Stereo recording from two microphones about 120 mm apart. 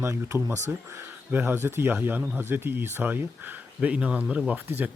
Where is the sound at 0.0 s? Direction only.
20° right (ahead or behind).